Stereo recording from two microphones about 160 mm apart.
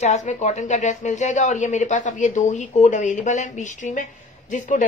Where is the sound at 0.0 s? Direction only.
45° left (ahead or behind).